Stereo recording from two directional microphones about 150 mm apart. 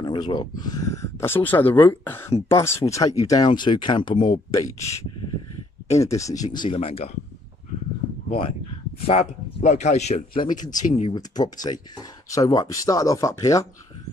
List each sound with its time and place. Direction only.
0.0 s speech: 30° left (ahead or behind)
5.9 s speech: 20° left (ahead or behind); by 7.1 s 40° left (ahead or behind)
9.0 s speech: 45° left (ahead or behind)
10.8 s speech: 55° left (ahead or behind)
11.1 s speech: 25° left (ahead or behind)